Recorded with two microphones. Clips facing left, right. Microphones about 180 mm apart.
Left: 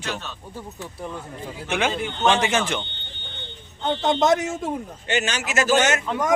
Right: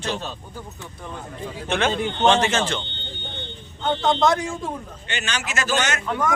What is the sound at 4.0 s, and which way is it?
Speech, 20° left (ahead or behind).